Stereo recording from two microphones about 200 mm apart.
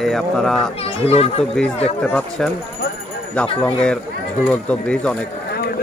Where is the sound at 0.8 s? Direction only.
30° left (ahead or behind).